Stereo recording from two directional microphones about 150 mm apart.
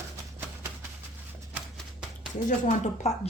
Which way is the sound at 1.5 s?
5° right (ahead or behind).